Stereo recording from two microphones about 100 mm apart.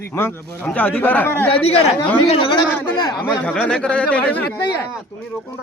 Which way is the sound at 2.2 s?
65° left (ahead or behind).